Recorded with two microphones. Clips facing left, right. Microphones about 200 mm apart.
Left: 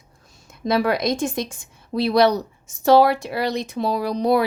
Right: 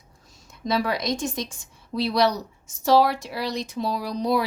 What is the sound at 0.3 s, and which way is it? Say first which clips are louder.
A woman's voice: left 4 dB; 55° left (ahead or behind).